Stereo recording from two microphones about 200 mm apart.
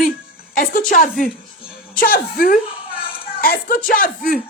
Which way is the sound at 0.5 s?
45° left (ahead or behind).